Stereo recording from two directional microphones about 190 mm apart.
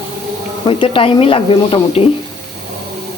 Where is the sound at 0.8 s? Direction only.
30° left (ahead or behind).